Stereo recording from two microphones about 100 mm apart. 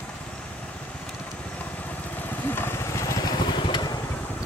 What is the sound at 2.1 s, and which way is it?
Vehicle, 20° left (ahead or behind).